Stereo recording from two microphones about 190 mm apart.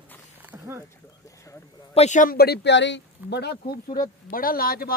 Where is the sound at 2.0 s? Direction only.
40° left (ahead or behind).